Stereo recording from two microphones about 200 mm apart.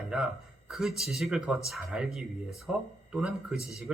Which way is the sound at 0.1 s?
5° right (ahead or behind).